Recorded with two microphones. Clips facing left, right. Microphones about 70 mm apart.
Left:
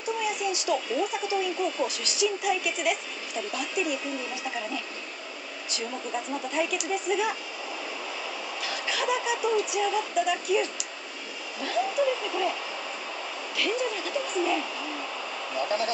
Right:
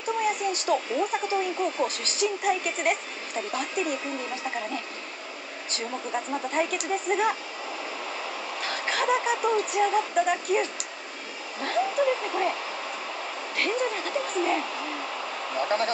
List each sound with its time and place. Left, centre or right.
0.2 s speech: right
5.7 s speech: right
8.5 s speech: right
13.6 s speech: right